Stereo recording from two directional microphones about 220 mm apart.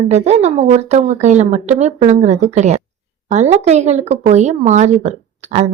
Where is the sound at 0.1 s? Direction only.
30° right (ahead or behind).